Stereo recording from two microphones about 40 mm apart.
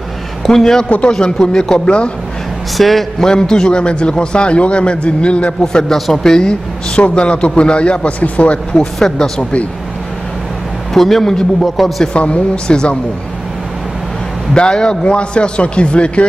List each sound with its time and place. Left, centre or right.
0.5 s a man's voice: centre
2.8 s a man's voice: centre
3.3 s a man's voice: centre
5.6 s a man's voice: centre
5.9 s a man's voice: centre
6.2 s a man's voice: centre
7.0 s a man's voice: left
9.0 s a man's voice: centre
9.4 s speech: left
10.9 s a man's voice: centre
12.1 s a man's voice: left
14.5 s a man's voice: left